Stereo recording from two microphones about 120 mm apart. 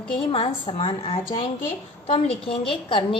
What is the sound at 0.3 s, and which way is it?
A woman's voice, 50° left (ahead or behind).